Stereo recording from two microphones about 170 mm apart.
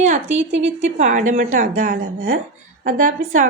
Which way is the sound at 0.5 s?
90° right.